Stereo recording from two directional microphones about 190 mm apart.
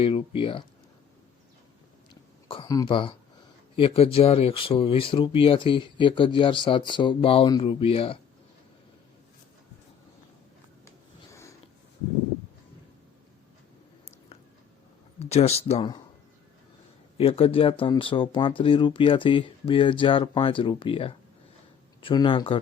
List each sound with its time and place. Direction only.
0.0 s speech: 30° left (ahead or behind)
2.5 s speech: 25° left (ahead or behind)
11.3 s a sound: 15° left (ahead or behind)
15.2 s speech: 35° left (ahead or behind)
17.2 s speech: 30° left (ahead or behind)